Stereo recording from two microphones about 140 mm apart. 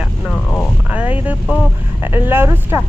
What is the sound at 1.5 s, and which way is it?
Speech, 10° right (ahead or behind).